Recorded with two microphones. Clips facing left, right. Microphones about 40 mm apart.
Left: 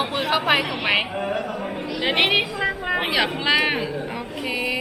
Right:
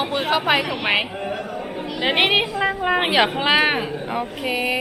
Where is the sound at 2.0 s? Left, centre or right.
Centre.